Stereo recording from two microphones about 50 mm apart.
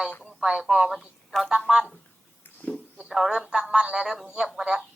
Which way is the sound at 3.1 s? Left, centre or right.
Centre.